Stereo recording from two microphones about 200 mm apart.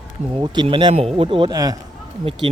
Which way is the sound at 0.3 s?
20° right (ahead or behind).